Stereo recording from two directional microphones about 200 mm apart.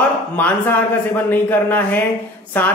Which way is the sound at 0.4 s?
10° left (ahead or behind).